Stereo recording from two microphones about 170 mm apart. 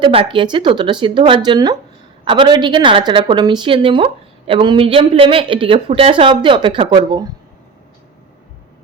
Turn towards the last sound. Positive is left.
turn(degrees=-25)  # may be behind; listen again after turning